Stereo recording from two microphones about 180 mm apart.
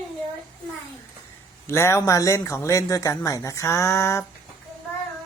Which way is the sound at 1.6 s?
15° left (ahead or behind).